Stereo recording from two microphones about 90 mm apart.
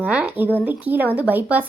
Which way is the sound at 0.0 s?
20° right (ahead or behind).